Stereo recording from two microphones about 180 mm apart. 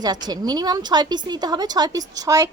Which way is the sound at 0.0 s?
20° right (ahead or behind).